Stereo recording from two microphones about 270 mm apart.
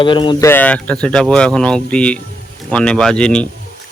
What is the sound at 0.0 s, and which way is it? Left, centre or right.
Speech, centre.